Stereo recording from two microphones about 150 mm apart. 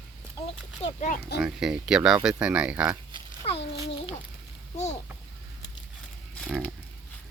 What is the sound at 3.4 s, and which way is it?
Speech, 40° left (ahead or behind).